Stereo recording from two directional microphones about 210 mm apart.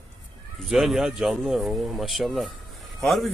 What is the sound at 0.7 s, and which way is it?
Speech, centre (ahead or behind).